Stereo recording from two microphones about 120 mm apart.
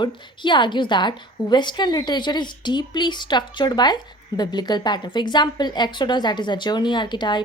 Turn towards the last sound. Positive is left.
turn(degrees=40)  # may be behind; listen again after turning